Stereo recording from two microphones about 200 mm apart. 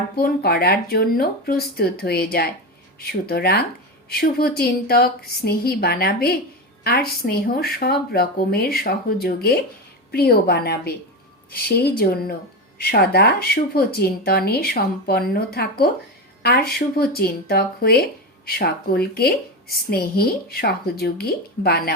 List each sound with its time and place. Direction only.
0.2 s a woman's voice: 50° left (ahead or behind)